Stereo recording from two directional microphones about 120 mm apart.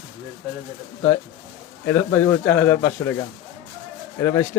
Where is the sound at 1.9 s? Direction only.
20° left (ahead or behind).